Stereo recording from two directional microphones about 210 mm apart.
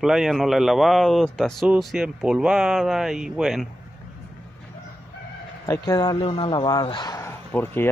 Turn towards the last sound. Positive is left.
turn(degrees=10)  # may be behind; listen again after turning